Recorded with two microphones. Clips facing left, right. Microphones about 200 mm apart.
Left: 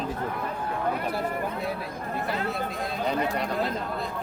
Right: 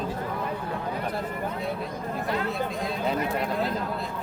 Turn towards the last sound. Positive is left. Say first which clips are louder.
# even
turn(degrees=0)  # may be behind; listen again after turning